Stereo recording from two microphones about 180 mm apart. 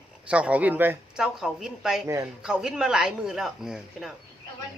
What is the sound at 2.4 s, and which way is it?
Speech, 5° right (ahead or behind).